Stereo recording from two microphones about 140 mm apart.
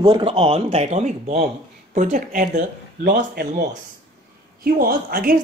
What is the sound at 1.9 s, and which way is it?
Speech, 70° right (ahead or behind).